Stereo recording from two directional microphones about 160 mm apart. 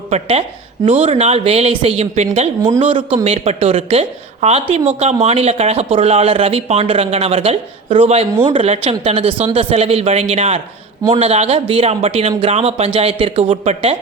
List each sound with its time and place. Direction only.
0.1 s speech: 40° right (ahead or behind)